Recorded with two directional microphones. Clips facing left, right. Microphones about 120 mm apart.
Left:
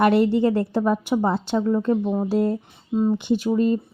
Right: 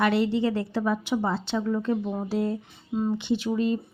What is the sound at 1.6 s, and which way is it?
Speech, 30° left (ahead or behind).